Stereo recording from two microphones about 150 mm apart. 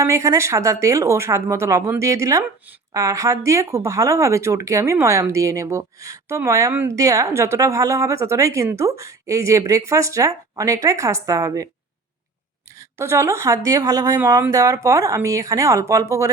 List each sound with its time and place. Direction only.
0.0 s speech: 20° right (ahead or behind)
13.0 s speech: 20° right (ahead or behind)